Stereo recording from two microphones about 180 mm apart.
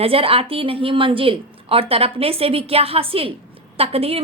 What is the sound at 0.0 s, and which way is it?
Speech, 30° right (ahead or behind).